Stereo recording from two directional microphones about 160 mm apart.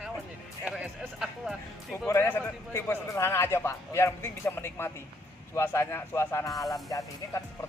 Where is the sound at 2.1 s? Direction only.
15° left (ahead or behind).